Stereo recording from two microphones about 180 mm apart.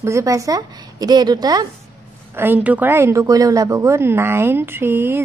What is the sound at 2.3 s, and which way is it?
A woman's voice, 10° right (ahead or behind).